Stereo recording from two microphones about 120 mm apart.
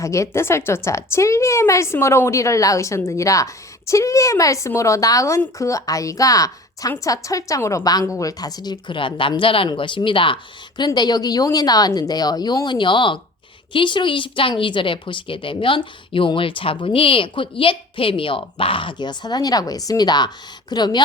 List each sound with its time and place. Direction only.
0.0 s a woman's voice: 25° left (ahead or behind)